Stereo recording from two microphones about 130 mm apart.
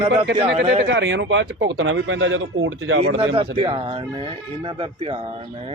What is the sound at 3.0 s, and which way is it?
Speech, 50° right (ahead or behind).